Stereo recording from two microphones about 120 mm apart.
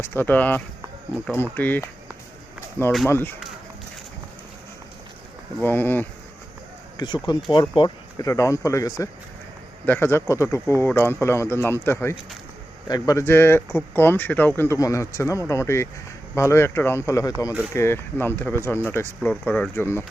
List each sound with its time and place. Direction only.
0.0 s speech: 20° left (ahead or behind)
3.1 s speech: 15° left (ahead or behind)
5.6 s speech: 15° left (ahead or behind)
6.9 s speech: 40° left (ahead or behind)
8.2 s speech: 25° left (ahead or behind)